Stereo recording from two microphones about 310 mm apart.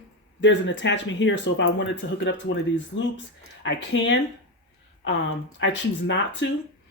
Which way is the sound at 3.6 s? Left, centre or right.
Left.